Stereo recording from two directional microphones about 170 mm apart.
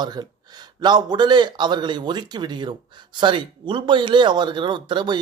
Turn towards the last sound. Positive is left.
turn(degrees=-25)  # may be behind; listen again after turning